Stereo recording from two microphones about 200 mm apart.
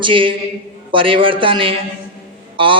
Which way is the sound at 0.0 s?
25° right (ahead or behind).